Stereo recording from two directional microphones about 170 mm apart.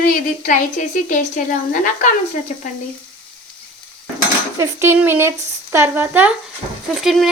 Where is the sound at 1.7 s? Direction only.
50° left (ahead or behind).